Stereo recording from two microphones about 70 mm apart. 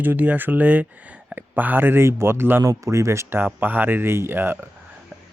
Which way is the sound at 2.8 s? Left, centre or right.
Right.